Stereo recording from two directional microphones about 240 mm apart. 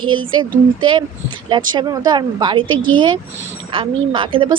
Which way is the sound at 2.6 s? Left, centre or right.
Right.